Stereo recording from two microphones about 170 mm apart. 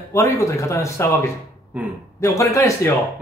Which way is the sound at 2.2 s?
20° left (ahead or behind).